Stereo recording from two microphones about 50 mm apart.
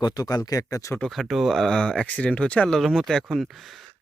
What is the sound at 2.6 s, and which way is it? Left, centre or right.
Speech, centre.